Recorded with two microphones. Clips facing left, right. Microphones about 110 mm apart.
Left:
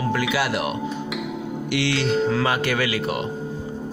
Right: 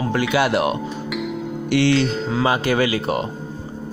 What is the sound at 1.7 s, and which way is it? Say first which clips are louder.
Speech: right 7 dB; 45° right (ahead or behind).